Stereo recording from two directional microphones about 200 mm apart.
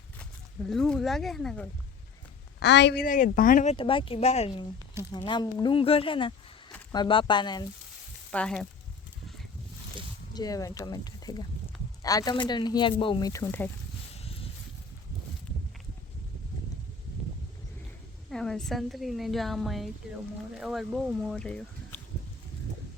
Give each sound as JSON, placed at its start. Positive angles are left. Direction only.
{"t": 0.2, "sound": "speech", "side_deg": 0}
{"t": 2.6, "sound": "speech", "side_deg": 60}
{"t": 8.3, "sound": "a woman's voice", "side_deg": 5}
{"t": 10.3, "sound": "speech", "side_deg": 20}
{"t": 14.2, "sound": "a sound", "side_deg": 30}
{"t": 18.3, "sound": "a woman's voice", "side_deg": 0}